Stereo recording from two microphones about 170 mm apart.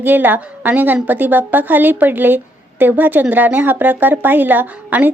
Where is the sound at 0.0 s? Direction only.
10° right (ahead or behind).